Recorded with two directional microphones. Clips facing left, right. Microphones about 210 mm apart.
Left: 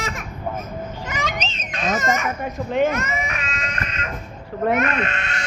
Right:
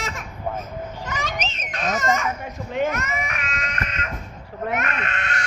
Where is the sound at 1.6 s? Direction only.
25° left (ahead or behind).